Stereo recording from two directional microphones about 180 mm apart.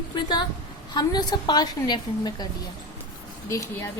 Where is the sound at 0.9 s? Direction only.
25° left (ahead or behind).